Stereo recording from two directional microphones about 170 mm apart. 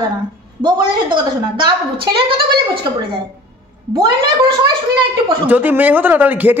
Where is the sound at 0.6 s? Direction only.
25° right (ahead or behind).